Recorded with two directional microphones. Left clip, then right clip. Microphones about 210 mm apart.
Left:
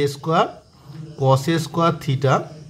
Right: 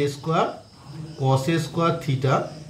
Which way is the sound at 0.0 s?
30° left (ahead or behind).